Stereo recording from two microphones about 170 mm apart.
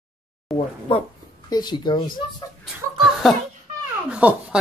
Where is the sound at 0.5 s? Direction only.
Centre (ahead or behind).